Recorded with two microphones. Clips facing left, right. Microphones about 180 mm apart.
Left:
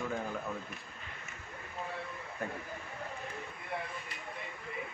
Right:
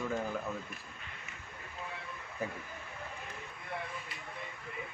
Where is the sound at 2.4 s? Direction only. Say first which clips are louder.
Right 1 dB; centre (ahead or behind).